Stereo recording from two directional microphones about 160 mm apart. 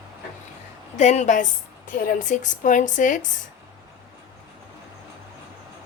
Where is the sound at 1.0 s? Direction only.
45° left (ahead or behind).